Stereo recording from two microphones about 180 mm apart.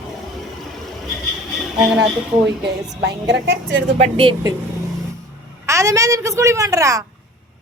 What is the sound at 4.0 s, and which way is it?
Speech, 30° right (ahead or behind).